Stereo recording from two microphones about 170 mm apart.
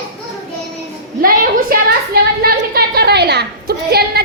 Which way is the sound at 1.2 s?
55° right (ahead or behind).